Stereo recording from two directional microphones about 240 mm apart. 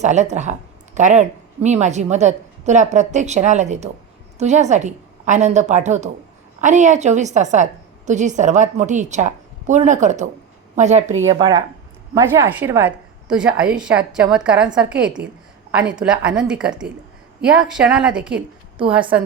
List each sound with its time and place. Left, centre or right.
0.0 s a woman's voice: right
11.3 s a woman's voice: centre